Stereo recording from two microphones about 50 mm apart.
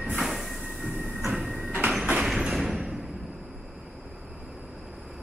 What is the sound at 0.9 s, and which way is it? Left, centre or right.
Train, right.